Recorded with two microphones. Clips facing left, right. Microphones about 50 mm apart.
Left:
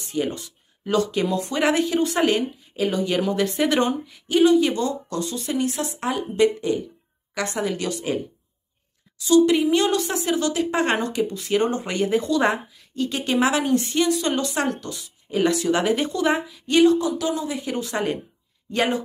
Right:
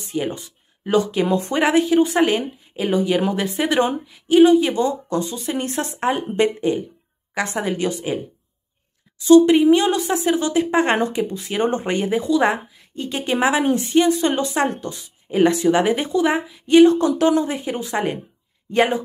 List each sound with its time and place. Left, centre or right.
0.1 s speech: centre
1.2 s speech: right
1.6 s speech: centre
5.6 s a woman's voice: right
9.2 s a woman's voice: right
9.7 s speech: centre
11.7 s speech: right; by 12.5 s centre
12.7 s speech: right
16.8 s a woman's voice: right
17.6 s speech: centre